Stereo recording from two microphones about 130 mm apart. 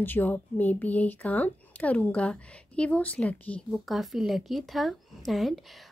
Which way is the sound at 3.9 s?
Centre (ahead or behind).